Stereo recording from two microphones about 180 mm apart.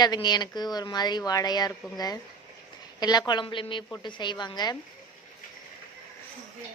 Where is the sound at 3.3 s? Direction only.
25° left (ahead or behind).